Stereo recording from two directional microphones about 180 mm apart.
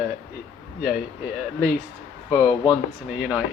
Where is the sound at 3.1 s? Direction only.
5° right (ahead or behind).